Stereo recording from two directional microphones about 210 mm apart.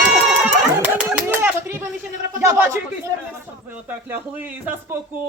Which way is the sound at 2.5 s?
10° right (ahead or behind).